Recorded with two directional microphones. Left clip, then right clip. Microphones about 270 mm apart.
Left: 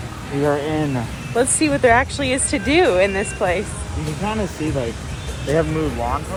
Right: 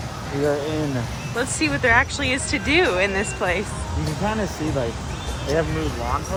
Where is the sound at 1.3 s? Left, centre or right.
Centre.